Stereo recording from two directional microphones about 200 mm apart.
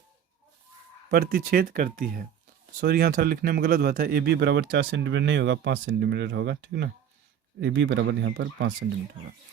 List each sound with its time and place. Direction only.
1.1 s speech: 50° right (ahead or behind)